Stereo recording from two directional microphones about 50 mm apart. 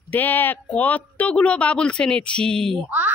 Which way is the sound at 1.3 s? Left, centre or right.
Left.